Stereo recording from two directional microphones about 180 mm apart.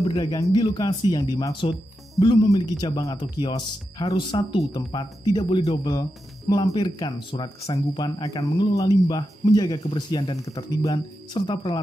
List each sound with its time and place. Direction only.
0.0 s speech: 25° left (ahead or behind)